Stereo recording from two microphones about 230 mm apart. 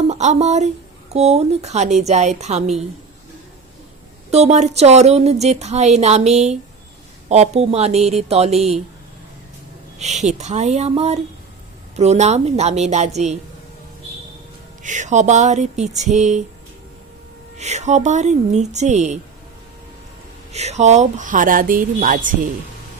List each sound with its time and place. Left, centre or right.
0.1 s speech: right
4.3 s speech: right
10.0 s speech: right
14.8 s speech: right
17.6 s speech: right
20.5 s speech: right